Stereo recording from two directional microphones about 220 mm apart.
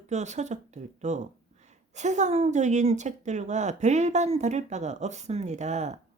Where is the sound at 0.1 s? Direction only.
30° right (ahead or behind).